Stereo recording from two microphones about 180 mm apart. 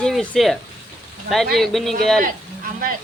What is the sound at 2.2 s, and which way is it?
Speech, 50° right (ahead or behind).